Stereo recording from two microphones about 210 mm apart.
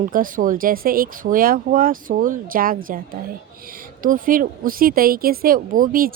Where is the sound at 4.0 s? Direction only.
40° right (ahead or behind).